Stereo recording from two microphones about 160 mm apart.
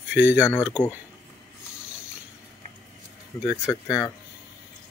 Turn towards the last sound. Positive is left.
turn(degrees=20)  # may be behind; listen again after turning